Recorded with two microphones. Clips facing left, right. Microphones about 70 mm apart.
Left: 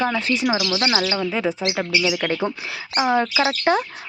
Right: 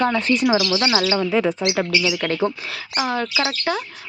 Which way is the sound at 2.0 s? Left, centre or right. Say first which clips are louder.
Right 1 dB; centre.